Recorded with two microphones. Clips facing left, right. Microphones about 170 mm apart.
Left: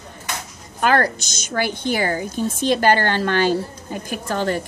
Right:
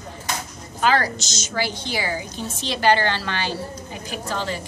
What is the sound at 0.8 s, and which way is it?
A woman's voice, 55° left (ahead or behind).